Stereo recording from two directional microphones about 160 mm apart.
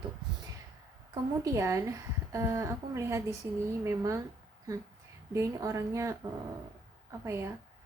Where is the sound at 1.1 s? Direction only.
20° right (ahead or behind).